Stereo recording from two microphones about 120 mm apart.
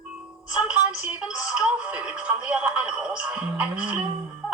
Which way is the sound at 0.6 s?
10° right (ahead or behind).